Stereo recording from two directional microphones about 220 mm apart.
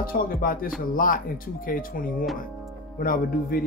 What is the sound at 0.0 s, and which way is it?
Speech, 40° left (ahead or behind).